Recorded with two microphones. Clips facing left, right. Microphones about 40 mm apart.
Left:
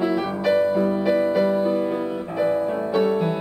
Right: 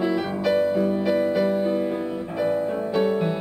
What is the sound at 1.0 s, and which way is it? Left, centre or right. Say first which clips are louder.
Music: left 2 dB; centre.